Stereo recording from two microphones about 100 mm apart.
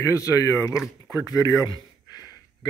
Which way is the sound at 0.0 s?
30° left (ahead or behind).